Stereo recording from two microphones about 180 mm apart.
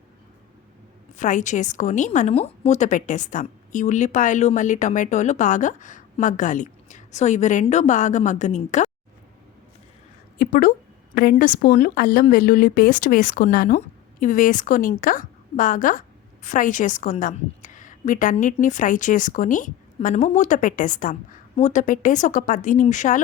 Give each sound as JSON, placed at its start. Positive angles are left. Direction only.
{"t": 1.2, "sound": "a woman's voice", "side_deg": 45}
{"t": 10.3, "sound": "a woman's voice", "side_deg": 50}